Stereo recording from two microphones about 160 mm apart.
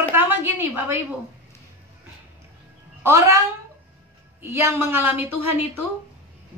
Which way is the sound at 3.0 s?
15° right (ahead or behind).